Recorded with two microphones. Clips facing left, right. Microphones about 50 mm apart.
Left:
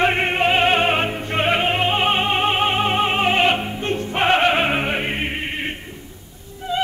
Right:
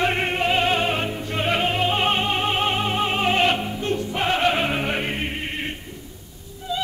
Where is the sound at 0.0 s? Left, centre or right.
Left.